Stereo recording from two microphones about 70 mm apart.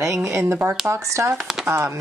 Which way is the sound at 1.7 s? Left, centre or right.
Right.